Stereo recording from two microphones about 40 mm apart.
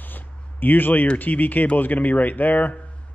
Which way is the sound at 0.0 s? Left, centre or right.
Left.